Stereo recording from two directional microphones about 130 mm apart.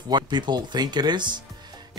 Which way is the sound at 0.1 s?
35° right (ahead or behind).